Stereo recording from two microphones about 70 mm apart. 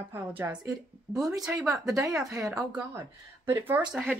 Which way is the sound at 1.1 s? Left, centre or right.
Right.